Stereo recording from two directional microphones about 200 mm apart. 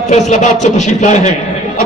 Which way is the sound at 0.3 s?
35° left (ahead or behind).